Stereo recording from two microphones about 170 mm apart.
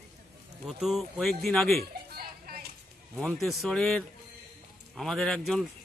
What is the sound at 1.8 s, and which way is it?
Music, 65° right (ahead or behind).